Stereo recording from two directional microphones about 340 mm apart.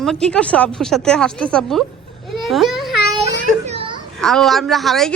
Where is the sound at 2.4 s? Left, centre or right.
Centre.